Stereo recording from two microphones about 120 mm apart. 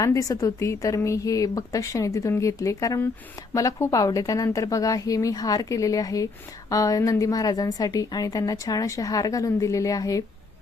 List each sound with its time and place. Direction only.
0.0 s a woman's voice: 30° left (ahead or behind)